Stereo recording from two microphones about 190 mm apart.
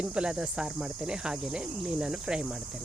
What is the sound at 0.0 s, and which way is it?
Speech, 5° right (ahead or behind).